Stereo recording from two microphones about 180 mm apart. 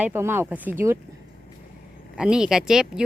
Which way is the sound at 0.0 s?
15° right (ahead or behind).